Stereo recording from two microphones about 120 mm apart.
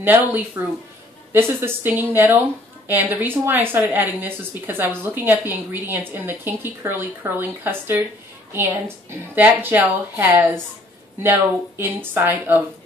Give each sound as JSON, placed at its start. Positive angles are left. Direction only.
{"t": 0.0, "sound": "a woman's voice", "side_deg": -15}